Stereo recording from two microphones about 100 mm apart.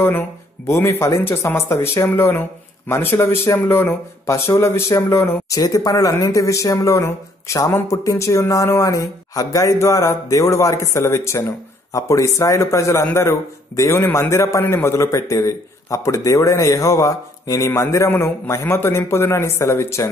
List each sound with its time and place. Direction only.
0.7 s speech: 25° left (ahead or behind)
5.5 s speech: 35° left (ahead or behind)